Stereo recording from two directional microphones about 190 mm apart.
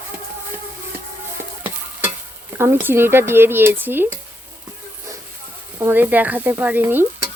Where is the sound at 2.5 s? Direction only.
10° right (ahead or behind).